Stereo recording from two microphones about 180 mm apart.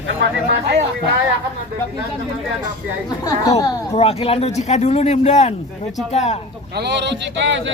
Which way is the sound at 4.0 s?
35° left (ahead or behind).